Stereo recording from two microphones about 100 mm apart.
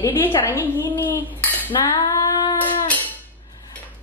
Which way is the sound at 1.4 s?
20° left (ahead or behind).